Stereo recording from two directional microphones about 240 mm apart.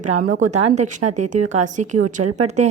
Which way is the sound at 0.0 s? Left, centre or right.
Right.